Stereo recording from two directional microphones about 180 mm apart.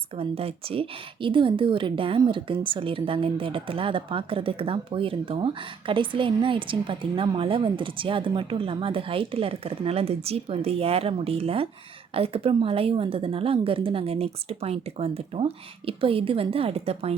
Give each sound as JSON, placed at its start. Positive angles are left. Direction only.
{"t": 0.2, "sound": "a woman's voice", "side_deg": -30}